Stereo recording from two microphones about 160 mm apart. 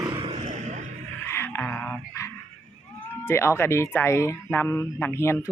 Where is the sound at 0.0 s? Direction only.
35° right (ahead or behind); by 0.8 s 50° right (ahead or behind).